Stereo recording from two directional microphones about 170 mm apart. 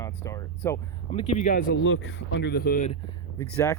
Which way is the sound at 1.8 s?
90° left.